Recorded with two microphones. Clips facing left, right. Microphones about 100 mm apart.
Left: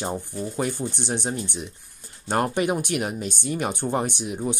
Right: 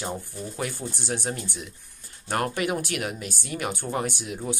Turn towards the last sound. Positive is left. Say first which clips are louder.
# left 3 dB
turn(degrees=25)  # may be behind; listen again after turning